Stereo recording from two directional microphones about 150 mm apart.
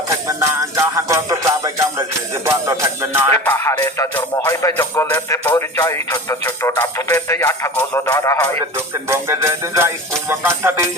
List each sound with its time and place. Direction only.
0.3 s music: 15° right (ahead or behind)
3.4 s speech: 15° left (ahead or behind)
9.0 s music: 20° right (ahead or behind)